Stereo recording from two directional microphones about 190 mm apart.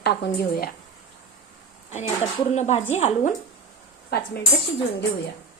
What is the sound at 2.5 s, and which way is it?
Speech, 35° left (ahead or behind).